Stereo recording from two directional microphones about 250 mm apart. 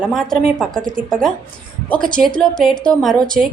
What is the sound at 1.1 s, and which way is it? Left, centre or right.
Speech, centre.